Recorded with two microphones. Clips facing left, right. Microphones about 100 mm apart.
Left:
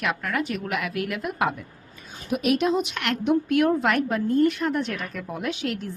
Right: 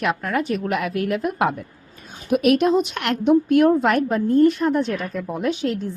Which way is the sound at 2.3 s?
60° right (ahead or behind).